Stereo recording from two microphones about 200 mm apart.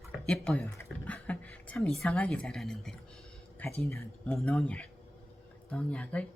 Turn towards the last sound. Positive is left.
turn(degrees=5)  # may be behind; listen again after turning